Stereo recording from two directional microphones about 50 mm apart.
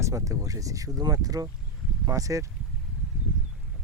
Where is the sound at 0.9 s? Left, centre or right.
Right.